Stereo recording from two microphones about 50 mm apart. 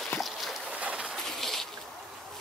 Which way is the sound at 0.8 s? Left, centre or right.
Right.